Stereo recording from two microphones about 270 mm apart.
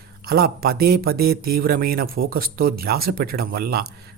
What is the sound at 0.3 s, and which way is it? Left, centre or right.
Speech, right.